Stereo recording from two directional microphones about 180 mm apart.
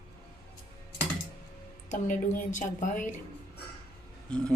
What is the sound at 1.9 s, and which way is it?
A woman's voice, 45° left (ahead or behind).